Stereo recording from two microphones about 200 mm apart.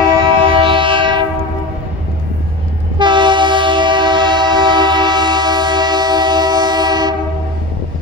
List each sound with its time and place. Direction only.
0.2 s train: 25° right (ahead or behind)
3.0 s train: 25° right (ahead or behind)